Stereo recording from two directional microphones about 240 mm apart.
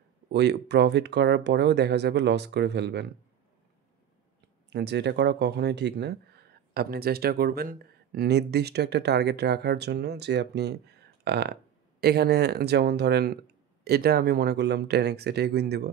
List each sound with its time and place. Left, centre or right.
0.3 s speech: right
4.6 s speech: right